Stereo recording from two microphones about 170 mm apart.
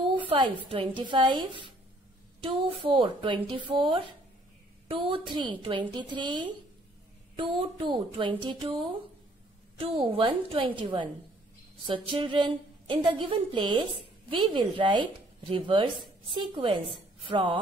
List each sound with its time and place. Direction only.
0.0 s a woman's voice: 30° right (ahead or behind)
7.7 s a woman's voice: 30° right (ahead or behind)